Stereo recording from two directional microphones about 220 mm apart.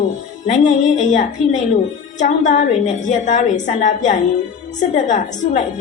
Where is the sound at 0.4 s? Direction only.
35° left (ahead or behind).